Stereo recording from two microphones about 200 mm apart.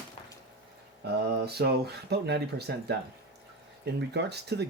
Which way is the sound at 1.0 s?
55° right (ahead or behind).